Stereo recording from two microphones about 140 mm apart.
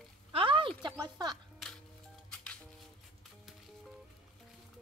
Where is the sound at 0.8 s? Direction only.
30° right (ahead or behind).